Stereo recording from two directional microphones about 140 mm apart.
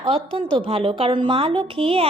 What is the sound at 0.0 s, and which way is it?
A woman's voice, 40° right (ahead or behind).